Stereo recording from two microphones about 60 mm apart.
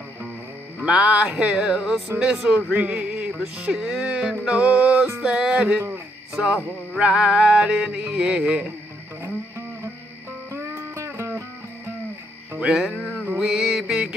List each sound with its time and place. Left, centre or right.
0.8 s music: centre
1.8 s speech: centre
2.1 s music: centre
2.7 s speech: centre
3.5 s music: centre
5.2 s music: centre
7.0 s music: centre
11.1 s music: right
12.5 s music: centre